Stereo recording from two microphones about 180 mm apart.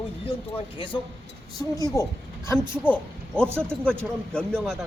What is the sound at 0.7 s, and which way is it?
Speech, 30° left (ahead or behind).